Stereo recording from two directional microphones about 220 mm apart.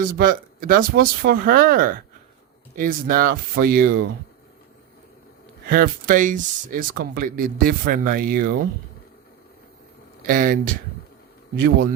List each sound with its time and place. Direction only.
0.0 s speech: 40° right (ahead or behind)
5.6 s speech: 40° right (ahead or behind)
10.2 s speech: 40° right (ahead or behind)